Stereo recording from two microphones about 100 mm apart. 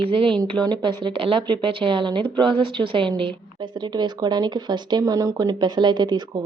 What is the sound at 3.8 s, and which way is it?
Speech, 45° right (ahead or behind).